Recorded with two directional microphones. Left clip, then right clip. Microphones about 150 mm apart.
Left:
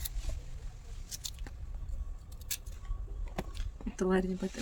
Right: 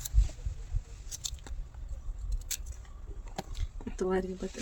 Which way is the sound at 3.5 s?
15° left (ahead or behind).